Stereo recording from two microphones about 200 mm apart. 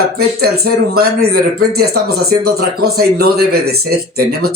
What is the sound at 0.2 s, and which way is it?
Speech, 50° right (ahead or behind).